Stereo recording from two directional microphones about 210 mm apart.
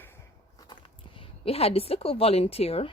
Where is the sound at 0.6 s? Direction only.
25° left (ahead or behind).